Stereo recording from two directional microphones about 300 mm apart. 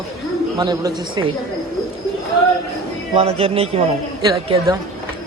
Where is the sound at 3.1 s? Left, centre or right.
Centre.